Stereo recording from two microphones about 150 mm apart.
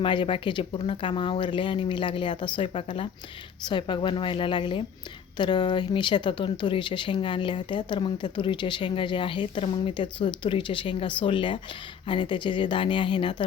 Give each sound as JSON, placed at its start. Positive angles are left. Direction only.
{"t": 0.0, "sound": "speech", "side_deg": 35}